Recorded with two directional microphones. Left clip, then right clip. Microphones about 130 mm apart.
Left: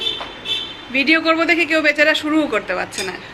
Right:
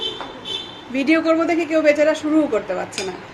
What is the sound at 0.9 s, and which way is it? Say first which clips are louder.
A man's voice: left 2 dB; 25° right (ahead or behind).